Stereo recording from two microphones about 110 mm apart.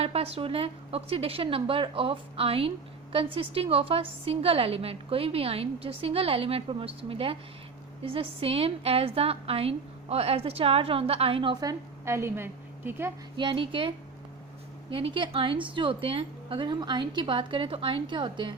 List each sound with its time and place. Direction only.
0.0 s a woman's voice: 65° right (ahead or behind)
11.6 s a woman's voice: 30° right (ahead or behind)
13.3 s a woman's voice: 45° right (ahead or behind)